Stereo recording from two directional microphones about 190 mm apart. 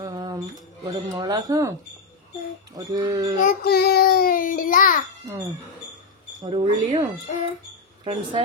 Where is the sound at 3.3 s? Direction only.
45° left (ahead or behind).